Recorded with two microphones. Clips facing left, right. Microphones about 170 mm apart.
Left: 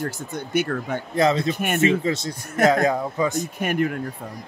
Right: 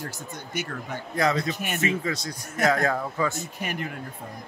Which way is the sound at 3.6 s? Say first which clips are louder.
Left 11 dB; 55° left (ahead or behind).